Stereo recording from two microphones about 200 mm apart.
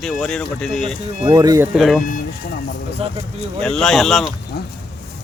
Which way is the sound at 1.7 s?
Centre (ahead or behind).